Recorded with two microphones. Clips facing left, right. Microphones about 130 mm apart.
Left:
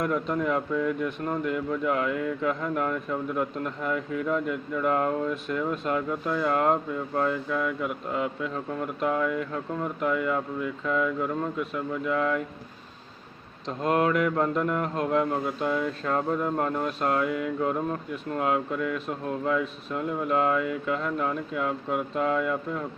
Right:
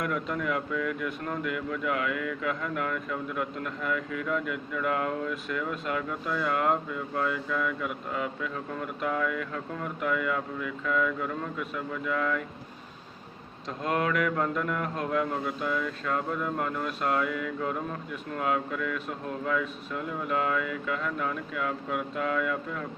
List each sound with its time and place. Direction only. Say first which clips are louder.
0.0 s speech: left 4 dB; 30° left (ahead or behind)
9.0 s speech: left 3 dB; 30° left (ahead or behind)
13.8 s speech: left 4 dB; 35° left (ahead or behind)